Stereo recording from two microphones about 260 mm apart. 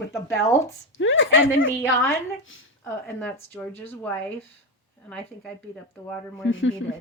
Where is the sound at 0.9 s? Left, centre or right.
Left.